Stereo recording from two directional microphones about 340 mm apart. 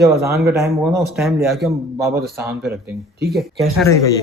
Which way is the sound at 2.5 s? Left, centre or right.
Right.